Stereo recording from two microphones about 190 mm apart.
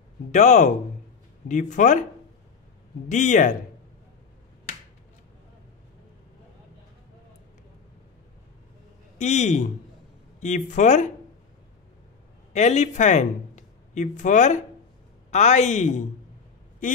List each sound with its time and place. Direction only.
0.3 s a man's voice: 40° left (ahead or behind)
3.1 s a man's voice: 40° left (ahead or behind)
9.2 s a man's voice: 40° left (ahead or behind)
12.5 s a man's voice: 35° left (ahead or behind)